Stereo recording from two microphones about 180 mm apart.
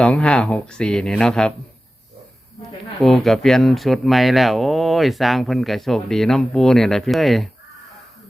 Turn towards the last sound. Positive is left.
turn(degrees=0)  # may be behind; listen again after turning